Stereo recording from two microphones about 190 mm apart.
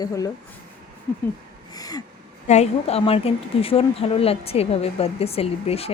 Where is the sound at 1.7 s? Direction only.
20° left (ahead or behind).